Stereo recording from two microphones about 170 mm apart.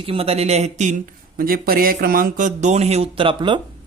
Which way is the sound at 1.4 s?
60° right (ahead or behind).